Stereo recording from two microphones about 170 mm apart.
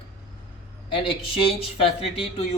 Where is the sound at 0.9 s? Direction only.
30° left (ahead or behind).